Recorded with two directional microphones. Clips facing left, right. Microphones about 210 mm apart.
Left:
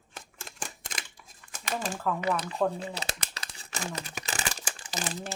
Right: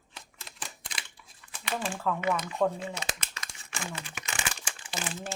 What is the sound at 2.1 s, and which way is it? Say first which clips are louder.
Crumpling: right 1 dB; 35° left (ahead or behind).